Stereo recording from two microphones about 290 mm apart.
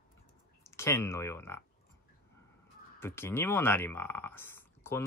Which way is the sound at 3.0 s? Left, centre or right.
Centre.